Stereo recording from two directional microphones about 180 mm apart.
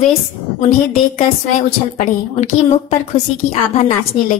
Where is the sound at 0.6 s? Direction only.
35° left (ahead or behind).